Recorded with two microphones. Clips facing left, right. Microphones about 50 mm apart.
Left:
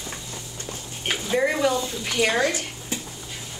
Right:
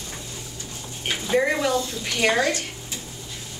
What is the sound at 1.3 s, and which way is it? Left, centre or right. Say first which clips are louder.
A woman's voice: right 1 dB; centre.